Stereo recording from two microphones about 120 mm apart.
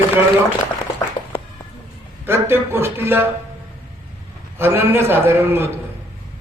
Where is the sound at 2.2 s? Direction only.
20° right (ahead or behind).